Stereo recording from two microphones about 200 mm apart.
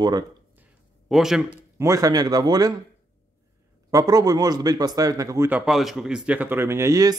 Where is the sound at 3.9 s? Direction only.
15° right (ahead or behind).